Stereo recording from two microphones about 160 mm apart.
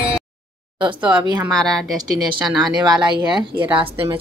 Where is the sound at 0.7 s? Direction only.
30° right (ahead or behind).